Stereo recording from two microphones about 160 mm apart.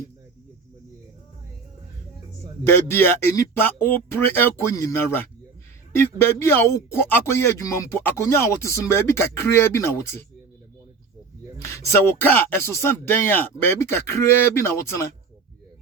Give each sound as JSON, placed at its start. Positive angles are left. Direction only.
{"t": 2.6, "sound": "speech", "side_deg": 15}
{"t": 11.7, "sound": "speech", "side_deg": 15}